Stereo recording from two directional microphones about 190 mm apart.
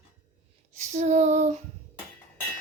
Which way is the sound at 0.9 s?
35° right (ahead or behind).